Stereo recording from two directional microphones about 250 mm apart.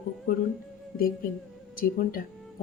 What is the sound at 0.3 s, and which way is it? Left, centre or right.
Speech, left.